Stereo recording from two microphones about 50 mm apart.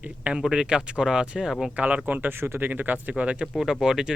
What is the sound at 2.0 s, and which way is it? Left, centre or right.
Speech, right.